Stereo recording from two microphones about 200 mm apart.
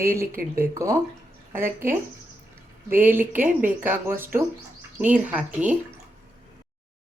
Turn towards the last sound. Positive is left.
turn(degrees=-5)  # may be behind; listen again after turning